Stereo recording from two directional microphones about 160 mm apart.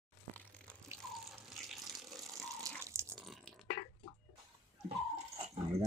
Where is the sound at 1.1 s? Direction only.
Centre (ahead or behind).